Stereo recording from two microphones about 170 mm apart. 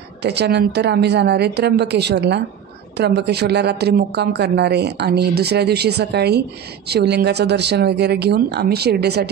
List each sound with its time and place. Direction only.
0.2 s a woman's voice: 80° right